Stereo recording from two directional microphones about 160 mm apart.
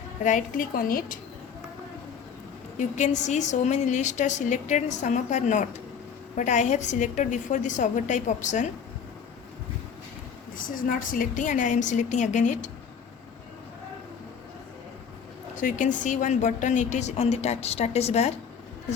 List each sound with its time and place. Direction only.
0.2 s a woman's voice: 50° left (ahead or behind)
2.7 s a woman's voice: 50° left (ahead or behind)
10.8 s a woman's voice: 60° left (ahead or behind)
15.6 s a woman's voice: 50° left (ahead or behind)